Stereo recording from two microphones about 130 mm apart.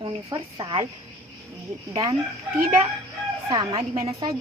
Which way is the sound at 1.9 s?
50° right (ahead or behind).